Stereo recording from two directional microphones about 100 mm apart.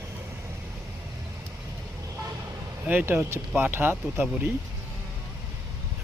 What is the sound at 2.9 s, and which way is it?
Speech, 20° right (ahead or behind).